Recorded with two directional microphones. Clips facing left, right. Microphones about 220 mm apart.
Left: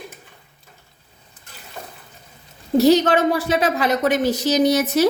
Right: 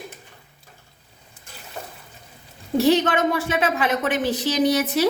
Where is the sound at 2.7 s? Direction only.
40° left (ahead or behind).